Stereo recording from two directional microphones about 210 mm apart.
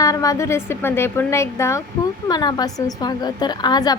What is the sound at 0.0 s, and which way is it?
A woman's voice, 15° left (ahead or behind).